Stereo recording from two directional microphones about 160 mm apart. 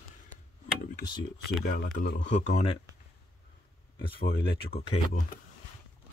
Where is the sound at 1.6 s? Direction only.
55° left (ahead or behind).